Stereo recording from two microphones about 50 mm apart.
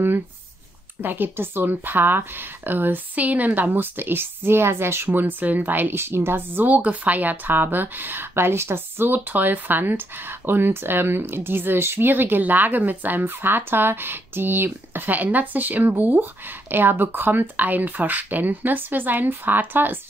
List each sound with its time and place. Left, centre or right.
1.0 s speech: right
5.9 s speech: right
6.6 s speech: right